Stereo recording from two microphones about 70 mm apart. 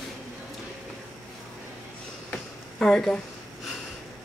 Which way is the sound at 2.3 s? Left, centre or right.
Centre.